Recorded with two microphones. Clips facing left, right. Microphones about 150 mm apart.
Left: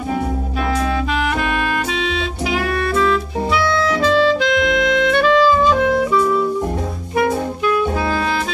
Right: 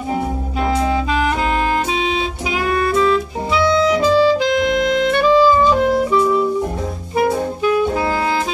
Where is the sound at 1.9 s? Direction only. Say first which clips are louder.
Right 2 dB; 60° left (ahead or behind).